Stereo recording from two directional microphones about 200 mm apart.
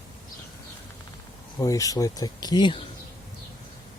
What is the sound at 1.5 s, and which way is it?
Speech, 15° left (ahead or behind).